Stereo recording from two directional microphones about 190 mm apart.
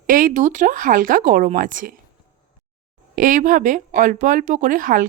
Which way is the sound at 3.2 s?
45° right (ahead or behind).